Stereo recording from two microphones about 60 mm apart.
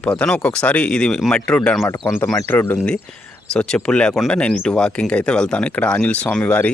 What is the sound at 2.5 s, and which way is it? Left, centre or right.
Speech, left.